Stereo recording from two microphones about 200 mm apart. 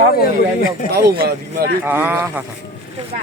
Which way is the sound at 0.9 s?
50° right (ahead or behind).